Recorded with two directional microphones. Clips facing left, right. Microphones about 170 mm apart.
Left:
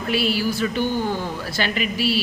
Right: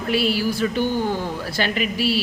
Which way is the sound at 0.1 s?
45° right (ahead or behind).